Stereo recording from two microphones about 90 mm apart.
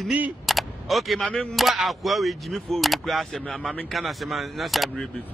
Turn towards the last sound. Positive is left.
turn(degrees=0)  # may be behind; listen again after turning